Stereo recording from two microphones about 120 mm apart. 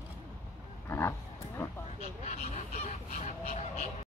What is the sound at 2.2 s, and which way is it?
Goose, 60° left (ahead or behind).